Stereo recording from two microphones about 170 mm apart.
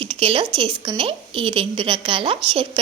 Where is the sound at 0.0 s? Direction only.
30° right (ahead or behind).